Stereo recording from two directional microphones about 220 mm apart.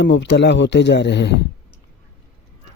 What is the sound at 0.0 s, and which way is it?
Speech, 55° left (ahead or behind).